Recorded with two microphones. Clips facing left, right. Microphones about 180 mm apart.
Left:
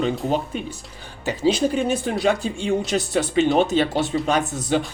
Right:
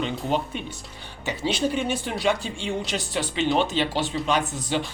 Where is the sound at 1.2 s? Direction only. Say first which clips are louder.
Left 5 dB; 40° left (ahead or behind).